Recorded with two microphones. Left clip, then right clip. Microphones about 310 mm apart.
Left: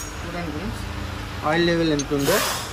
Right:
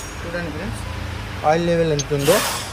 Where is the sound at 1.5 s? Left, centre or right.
Right.